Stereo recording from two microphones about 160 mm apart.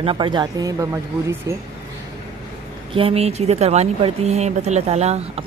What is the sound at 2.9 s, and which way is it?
A woman's voice, 35° right (ahead or behind).